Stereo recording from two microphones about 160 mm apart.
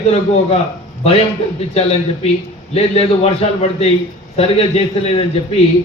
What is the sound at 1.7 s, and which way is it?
A man's voice, 40° left (ahead or behind).